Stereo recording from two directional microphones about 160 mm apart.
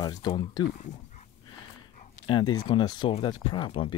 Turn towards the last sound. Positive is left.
turn(degrees=35)  # may be behind; listen again after turning